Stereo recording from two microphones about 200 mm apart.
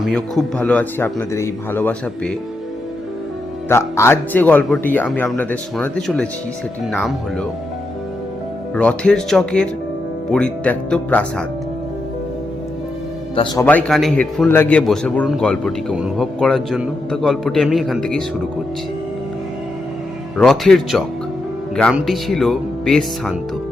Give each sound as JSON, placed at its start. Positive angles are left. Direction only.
{"t": 0.0, "sound": "speech", "side_deg": 0}
{"t": 3.7, "sound": "a man's voice", "side_deg": 10}
{"t": 8.7, "sound": "a man's voice", "side_deg": 5}
{"t": 13.3, "sound": "speech", "side_deg": 25}
{"t": 13.7, "sound": "a man's voice", "side_deg": 5}
{"t": 20.3, "sound": "a man's voice", "side_deg": 0}